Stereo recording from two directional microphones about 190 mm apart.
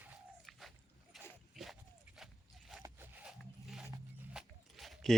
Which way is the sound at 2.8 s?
10° right (ahead or behind).